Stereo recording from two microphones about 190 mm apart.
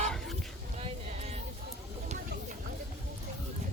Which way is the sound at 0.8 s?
35° right (ahead or behind).